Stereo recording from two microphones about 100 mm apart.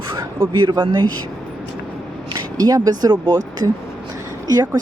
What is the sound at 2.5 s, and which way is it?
Speech, 40° right (ahead or behind).